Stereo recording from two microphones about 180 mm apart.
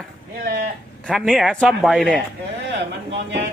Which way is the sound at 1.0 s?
Centre (ahead or behind).